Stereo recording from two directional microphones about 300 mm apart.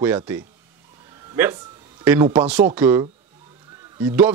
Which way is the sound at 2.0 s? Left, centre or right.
Centre.